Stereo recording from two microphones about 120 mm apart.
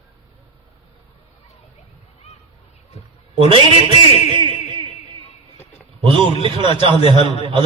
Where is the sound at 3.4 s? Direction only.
45° right (ahead or behind).